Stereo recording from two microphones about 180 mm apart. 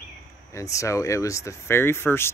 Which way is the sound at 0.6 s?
15° left (ahead or behind).